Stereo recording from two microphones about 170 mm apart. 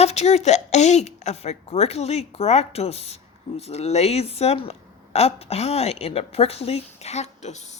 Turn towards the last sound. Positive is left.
turn(degrees=40)  # may be behind; listen again after turning